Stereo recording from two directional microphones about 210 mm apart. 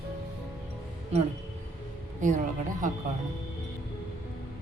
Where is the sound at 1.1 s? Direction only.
30° right (ahead or behind).